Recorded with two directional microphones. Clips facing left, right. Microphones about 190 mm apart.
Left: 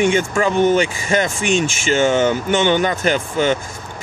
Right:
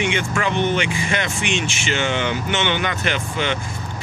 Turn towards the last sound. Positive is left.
turn(degrees=40)  # may be behind; listen again after turning